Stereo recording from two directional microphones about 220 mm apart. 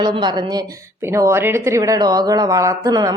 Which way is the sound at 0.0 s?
20° right (ahead or behind).